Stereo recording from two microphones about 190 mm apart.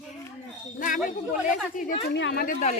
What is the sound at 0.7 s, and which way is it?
Speech, 45° left (ahead or behind).